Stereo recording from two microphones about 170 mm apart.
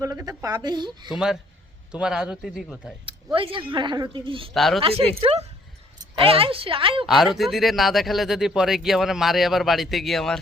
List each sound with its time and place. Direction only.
0.0 s a woman's voice: 20° right (ahead or behind)
1.1 s speech: 5° right (ahead or behind)
3.3 s speech: 30° right (ahead or behind)
4.5 s speech: centre (ahead or behind)
4.8 s speech: 35° right (ahead or behind)
7.0 s speech: centre (ahead or behind)